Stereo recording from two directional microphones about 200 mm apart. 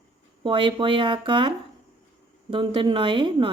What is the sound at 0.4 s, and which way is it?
A woman's voice, 25° right (ahead or behind).